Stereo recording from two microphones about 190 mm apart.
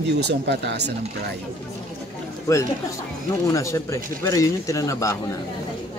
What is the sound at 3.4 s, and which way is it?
Speech, 15° left (ahead or behind).